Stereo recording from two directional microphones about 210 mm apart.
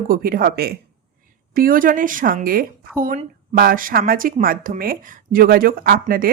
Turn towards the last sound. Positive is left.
turn(degrees=-45)  # may be behind; listen again after turning